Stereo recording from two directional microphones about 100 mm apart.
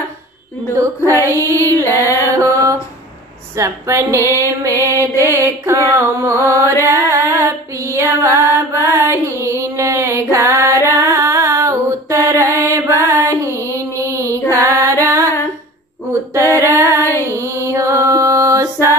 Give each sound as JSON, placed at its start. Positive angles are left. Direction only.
{"t": 1.6, "sound": "music", "side_deg": 25}
{"t": 2.3, "sound": "a sound", "side_deg": -30}
{"t": 3.5, "sound": "a woman's voice", "side_deg": -30}
{"t": 4.4, "sound": "music", "side_deg": -30}
{"t": 5.2, "sound": "mantra", "side_deg": -30}
{"t": 6.8, "sound": "female singing", "side_deg": -30}